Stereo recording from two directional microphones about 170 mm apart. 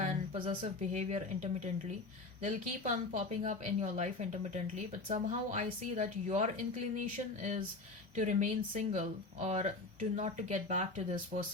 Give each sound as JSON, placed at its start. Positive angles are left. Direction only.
{"t": 0.6, "sound": "a woman's voice", "side_deg": -45}